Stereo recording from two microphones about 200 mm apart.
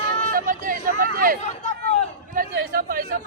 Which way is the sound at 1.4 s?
35° left (ahead or behind).